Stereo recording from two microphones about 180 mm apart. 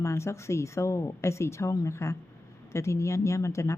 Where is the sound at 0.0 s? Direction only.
15° left (ahead or behind).